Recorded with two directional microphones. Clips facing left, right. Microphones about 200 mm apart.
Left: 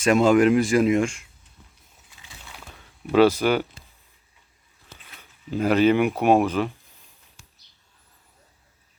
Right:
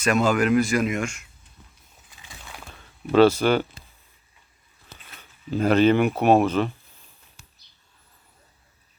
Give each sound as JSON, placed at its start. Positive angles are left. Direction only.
{"t": 0.0, "sound": "speech", "side_deg": 25}
{"t": 2.2, "sound": "a sound", "side_deg": -50}
{"t": 3.1, "sound": "speech", "side_deg": 10}
{"t": 5.5, "sound": "speech", "side_deg": 10}